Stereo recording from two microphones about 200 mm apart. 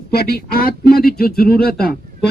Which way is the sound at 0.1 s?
50° left (ahead or behind).